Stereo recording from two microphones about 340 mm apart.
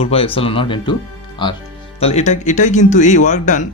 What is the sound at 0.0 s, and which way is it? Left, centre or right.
Speech, centre.